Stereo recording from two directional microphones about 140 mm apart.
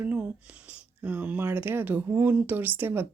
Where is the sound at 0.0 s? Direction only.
10° right (ahead or behind).